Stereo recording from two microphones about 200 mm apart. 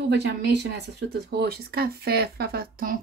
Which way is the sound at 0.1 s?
60° right (ahead or behind).